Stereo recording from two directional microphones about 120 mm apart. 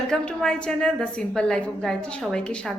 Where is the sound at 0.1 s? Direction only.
5° left (ahead or behind).